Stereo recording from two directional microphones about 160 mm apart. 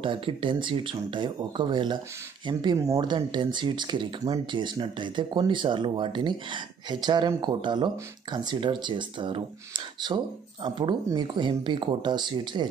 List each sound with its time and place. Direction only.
0.0 s speech: 35° right (ahead or behind)